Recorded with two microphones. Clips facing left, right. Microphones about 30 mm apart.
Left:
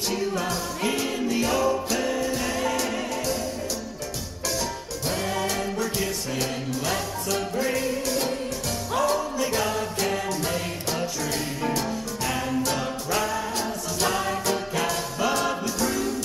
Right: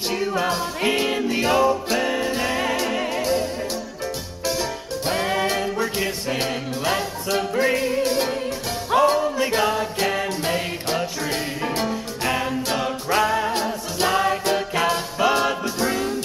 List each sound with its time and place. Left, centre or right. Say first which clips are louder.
0.1 s music: right 5 dB; right
4.5 s music: right 4 dB; right